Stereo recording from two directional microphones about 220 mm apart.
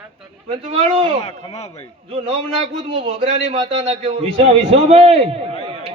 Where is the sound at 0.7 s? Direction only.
25° right (ahead or behind).